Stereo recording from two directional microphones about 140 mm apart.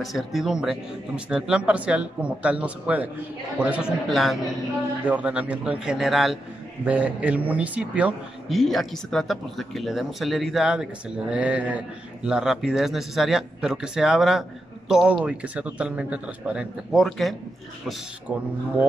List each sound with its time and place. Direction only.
0.0 s a man's voice: centre (ahead or behind)
8.5 s a man's voice: centre (ahead or behind)
18.3 s a man's voice: 10° right (ahead or behind)